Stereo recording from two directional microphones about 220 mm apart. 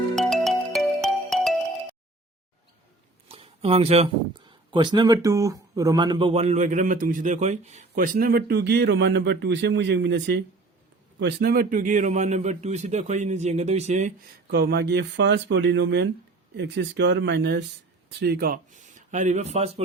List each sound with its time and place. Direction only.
0.2 s music: centre (ahead or behind)
3.2 s speech: 25° right (ahead or behind)
14.5 s speech: 50° right (ahead or behind); by 19.8 s 30° right (ahead or behind)